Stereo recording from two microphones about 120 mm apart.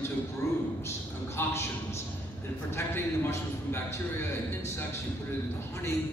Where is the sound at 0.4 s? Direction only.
25° left (ahead or behind).